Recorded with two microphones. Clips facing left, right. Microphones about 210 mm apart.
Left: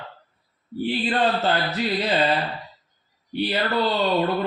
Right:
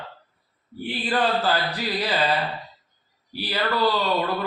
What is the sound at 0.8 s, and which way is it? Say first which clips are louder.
Speech: left 2 dB; 25° left (ahead or behind).